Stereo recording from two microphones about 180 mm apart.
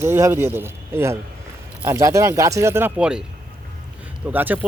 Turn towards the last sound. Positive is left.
turn(degrees=-10)  # may be behind; listen again after turning